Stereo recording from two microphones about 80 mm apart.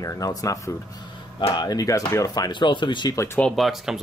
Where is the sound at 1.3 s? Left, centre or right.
Left.